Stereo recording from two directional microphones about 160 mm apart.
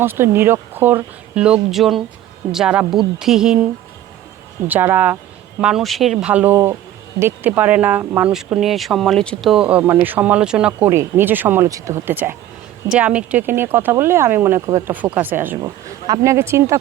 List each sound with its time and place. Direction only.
0.0 s speech: 15° right (ahead or behind)
4.7 s speech: 10° right (ahead or behind)
15.6 s speech: 25° right (ahead or behind)